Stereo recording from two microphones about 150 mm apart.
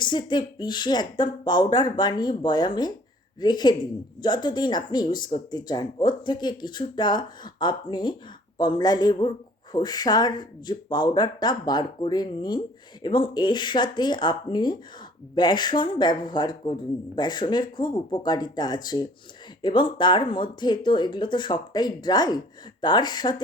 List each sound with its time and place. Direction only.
0.0 s speech: 30° left (ahead or behind)